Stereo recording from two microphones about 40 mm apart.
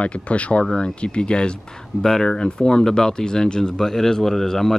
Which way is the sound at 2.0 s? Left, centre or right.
Centre.